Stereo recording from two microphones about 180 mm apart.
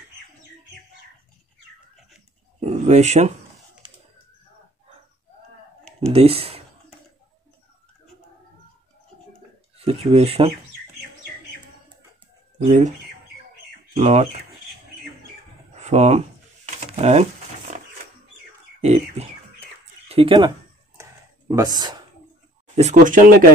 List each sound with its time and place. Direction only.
2.6 s speech: 40° right (ahead or behind)
3.8 s bird: 30° right (ahead or behind)
6.1 s speech: 30° right (ahead or behind)
10.1 s speech: 30° right (ahead or behind)
12.6 s speech: 40° right (ahead or behind)
13.9 s speech: 35° right (ahead or behind)
15.7 s speech: 40° right (ahead or behind)
17.7 s sewing machine: 45° right (ahead or behind)
18.8 s bird: 35° right (ahead or behind)
20.1 s speech: 30° right (ahead or behind)
21.0 s a sound: 15° right (ahead or behind)
22.8 s speech: 40° right (ahead or behind)